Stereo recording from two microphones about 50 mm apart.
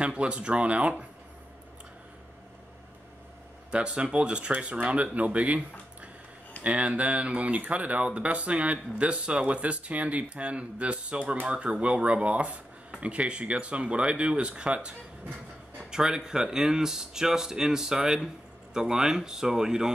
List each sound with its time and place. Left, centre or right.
0.0 s speech: right
3.7 s speech: right
15.9 s speech: centre